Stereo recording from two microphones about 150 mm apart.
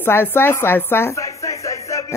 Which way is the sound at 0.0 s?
15° left (ahead or behind).